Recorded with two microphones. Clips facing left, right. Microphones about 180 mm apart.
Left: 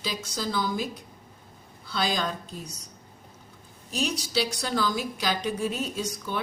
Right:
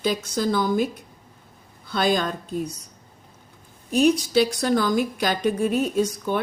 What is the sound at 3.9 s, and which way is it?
A woman's voice, 55° right (ahead or behind).